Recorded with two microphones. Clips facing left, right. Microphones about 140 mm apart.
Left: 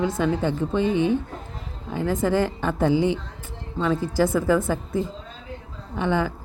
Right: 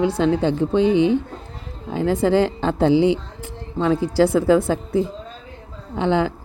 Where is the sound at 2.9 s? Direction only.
90° right.